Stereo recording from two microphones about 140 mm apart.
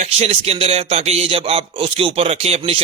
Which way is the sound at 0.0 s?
45° right (ahead or behind).